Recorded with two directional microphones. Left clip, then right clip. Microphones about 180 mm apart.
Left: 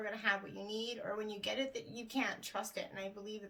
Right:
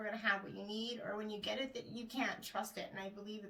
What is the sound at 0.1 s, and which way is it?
Speech, 45° left (ahead or behind).